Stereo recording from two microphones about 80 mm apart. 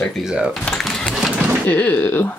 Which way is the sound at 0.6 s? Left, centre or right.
Centre.